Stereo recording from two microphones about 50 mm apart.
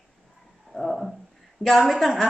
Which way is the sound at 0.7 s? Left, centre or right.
Centre.